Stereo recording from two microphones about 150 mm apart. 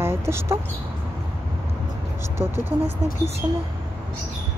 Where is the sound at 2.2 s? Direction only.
15° right (ahead or behind).